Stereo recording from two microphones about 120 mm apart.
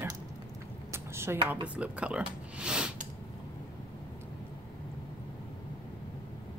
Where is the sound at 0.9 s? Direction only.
20° right (ahead or behind).